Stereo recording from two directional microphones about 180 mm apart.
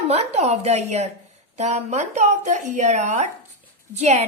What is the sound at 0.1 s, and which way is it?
A woman's voice, 35° right (ahead or behind).